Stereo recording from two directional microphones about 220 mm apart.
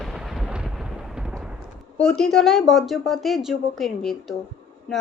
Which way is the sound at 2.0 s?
5° left (ahead or behind).